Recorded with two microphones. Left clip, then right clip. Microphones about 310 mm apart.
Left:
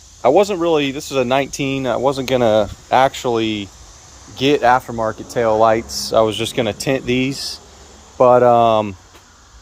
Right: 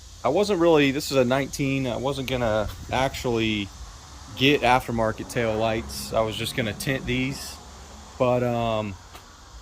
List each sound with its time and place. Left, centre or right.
0.2 s speech: centre
0.4 s speech: centre
2.9 s speech: centre
4.4 s speech: left
4.6 s speech: centre
5.4 s speech: left
5.9 s speech: centre
8.2 s speech: left
8.4 s speech: centre